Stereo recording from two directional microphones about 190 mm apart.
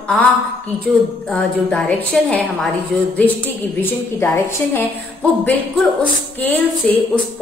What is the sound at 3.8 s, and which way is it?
A woman's voice, 10° left (ahead or behind).